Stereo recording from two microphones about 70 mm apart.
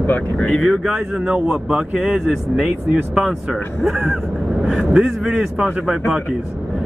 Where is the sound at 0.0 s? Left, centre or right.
Left.